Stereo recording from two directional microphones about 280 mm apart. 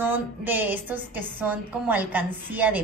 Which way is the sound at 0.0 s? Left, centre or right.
Centre.